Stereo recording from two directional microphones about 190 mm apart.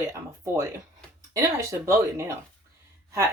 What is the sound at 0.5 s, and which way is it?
Speech, 15° right (ahead or behind).